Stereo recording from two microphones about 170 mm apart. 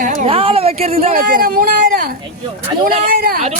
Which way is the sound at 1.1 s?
55° right (ahead or behind).